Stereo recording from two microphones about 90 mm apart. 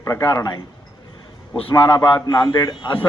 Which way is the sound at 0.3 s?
50° left (ahead or behind).